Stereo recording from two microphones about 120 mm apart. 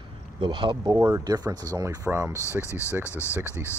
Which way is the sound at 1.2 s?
35° right (ahead or behind).